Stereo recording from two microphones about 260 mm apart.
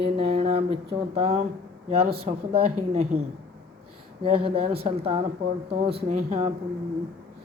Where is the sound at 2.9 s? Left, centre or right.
Right.